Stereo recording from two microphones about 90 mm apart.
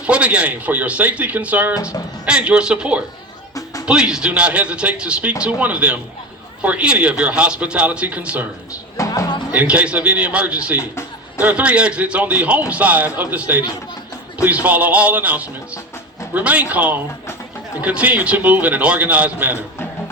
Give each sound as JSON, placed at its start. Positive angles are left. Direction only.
{"t": 0.0, "sound": "speech", "side_deg": -15}
{"t": 1.7, "sound": "speech", "side_deg": 35}
{"t": 2.2, "sound": "speech", "side_deg": -10}
{"t": 9.0, "sound": "music", "side_deg": 35}
{"t": 9.5, "sound": "speech", "side_deg": -15}